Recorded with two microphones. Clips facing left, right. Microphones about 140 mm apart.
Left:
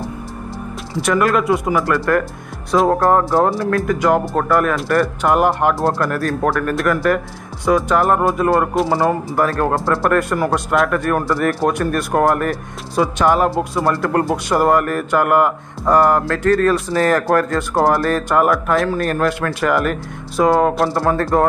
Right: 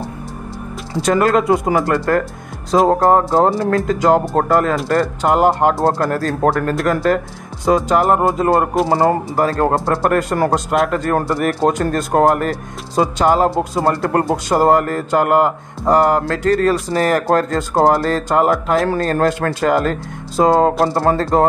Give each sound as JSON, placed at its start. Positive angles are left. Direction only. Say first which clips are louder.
{"t": 1.1, "sound": "speech", "louder": "right 2 dB", "side_deg": -25}